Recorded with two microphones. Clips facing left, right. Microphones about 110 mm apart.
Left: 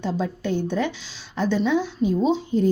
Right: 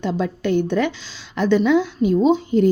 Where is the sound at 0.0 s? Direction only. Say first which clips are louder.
Right 4 dB; 70° right (ahead or behind).